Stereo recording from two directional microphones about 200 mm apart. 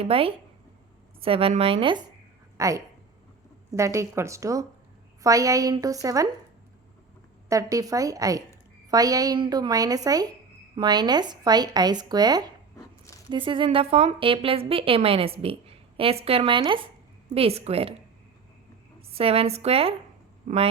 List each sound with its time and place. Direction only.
0.0 s a woman's voice: 30° right (ahead or behind)
7.5 s a woman's voice: 15° right (ahead or behind)
19.1 s a woman's voice: 30° right (ahead or behind)